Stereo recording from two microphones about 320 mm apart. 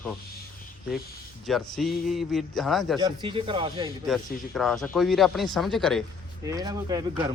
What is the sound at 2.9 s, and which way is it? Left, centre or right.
Speech, centre.